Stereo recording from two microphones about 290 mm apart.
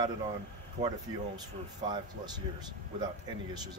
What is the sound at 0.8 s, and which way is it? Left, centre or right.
Speech, centre.